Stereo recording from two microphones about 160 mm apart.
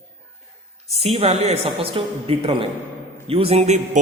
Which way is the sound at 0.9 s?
40° right (ahead or behind).